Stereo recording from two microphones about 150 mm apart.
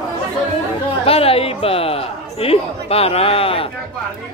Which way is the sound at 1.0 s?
40° left (ahead or behind).